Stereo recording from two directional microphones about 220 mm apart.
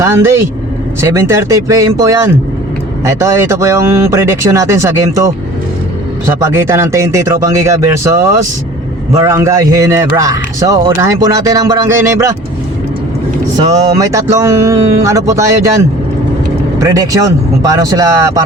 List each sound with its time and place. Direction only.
0.0 s speech: 10° right (ahead or behind)
9.2 s speech: 10° right (ahead or behind)
13.6 s speech: 15° right (ahead or behind)
16.8 s speech: 15° right (ahead or behind)